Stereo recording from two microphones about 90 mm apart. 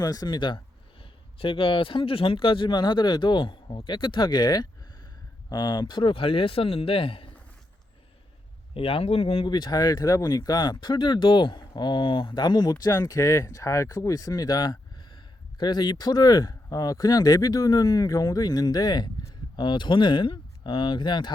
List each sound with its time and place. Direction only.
0.0 s speech: 45° left (ahead or behind); by 7.3 s 90° left
8.7 s speech: 90° left
9.5 s speech: 50° left (ahead or behind)